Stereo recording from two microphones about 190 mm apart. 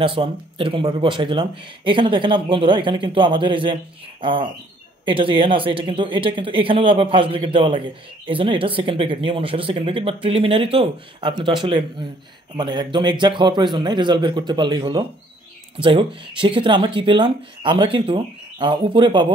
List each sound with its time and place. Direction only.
0.0 s speech: 30° right (ahead or behind)